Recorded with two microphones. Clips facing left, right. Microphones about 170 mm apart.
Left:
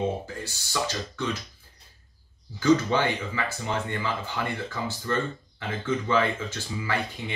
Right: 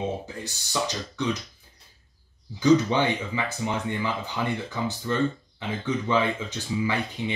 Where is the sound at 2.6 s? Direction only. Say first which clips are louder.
Right 2 dB; 20° right (ahead or behind).